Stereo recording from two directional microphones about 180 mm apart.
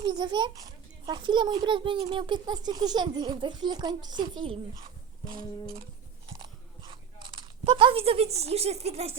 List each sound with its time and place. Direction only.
0.0 s a child's voice: 25° right (ahead or behind)
6.4 s biting: 25° right (ahead or behind)